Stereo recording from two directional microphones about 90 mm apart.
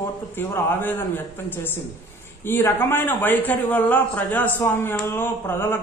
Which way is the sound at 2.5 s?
25° left (ahead or behind).